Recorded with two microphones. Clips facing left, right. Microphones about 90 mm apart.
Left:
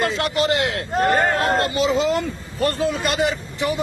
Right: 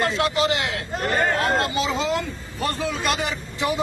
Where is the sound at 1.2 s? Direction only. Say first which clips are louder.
Left 2 dB; centre (ahead or behind).